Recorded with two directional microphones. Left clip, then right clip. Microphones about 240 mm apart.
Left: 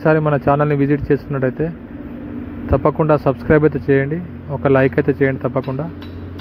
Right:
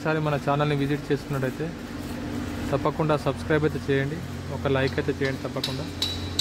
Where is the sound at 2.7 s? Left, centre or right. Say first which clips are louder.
Left 10 dB; centre.